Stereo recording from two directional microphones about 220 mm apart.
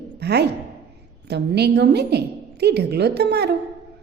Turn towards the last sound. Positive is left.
turn(degrees=-50)  # may be behind; listen again after turning